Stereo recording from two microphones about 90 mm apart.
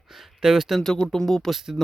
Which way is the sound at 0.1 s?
5° right (ahead or behind).